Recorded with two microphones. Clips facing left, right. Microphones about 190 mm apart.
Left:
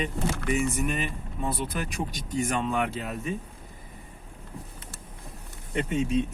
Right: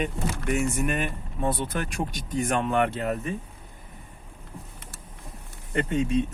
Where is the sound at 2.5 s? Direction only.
60° right (ahead or behind).